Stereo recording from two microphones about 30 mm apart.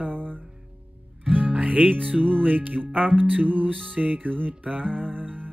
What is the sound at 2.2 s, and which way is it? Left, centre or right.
Music, right.